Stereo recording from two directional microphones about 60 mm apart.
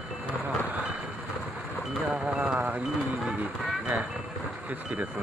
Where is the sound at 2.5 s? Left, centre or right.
Right.